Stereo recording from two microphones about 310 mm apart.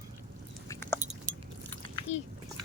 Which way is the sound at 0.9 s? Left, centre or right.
Right.